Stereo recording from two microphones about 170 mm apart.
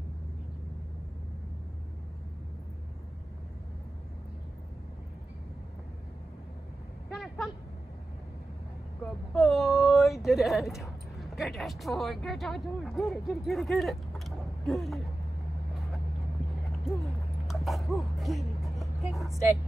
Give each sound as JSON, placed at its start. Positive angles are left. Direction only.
{"t": 7.1, "sound": "a sound", "side_deg": 0}
{"t": 9.0, "sound": "speech", "side_deg": 0}
{"t": 17.5, "sound": "music", "side_deg": 0}
{"t": 18.6, "sound": "vehicle", "side_deg": 0}